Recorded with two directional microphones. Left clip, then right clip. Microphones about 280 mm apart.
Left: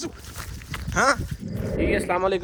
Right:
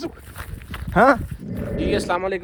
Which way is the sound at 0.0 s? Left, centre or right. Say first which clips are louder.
Right 2 dB; centre.